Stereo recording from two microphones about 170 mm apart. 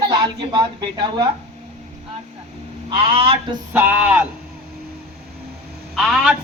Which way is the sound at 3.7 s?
10° right (ahead or behind).